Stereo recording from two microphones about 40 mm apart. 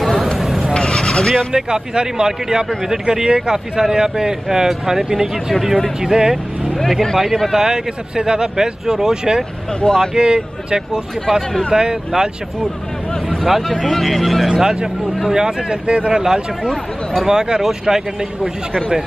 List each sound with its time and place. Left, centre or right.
0.0 s a sound: centre
0.4 s honk: centre
0.7 s a sound: centre
1.5 s a man's voice: centre
5.9 s speech: centre
6.8 s speech: centre
7.5 s a man's voice: centre
13.1 s speech: centre